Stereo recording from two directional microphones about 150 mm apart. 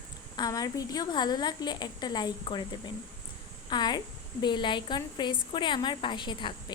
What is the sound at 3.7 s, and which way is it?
A woman's voice, 30° left (ahead or behind).